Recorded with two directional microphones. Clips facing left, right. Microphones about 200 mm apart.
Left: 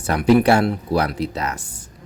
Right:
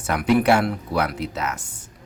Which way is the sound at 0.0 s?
35° left (ahead or behind).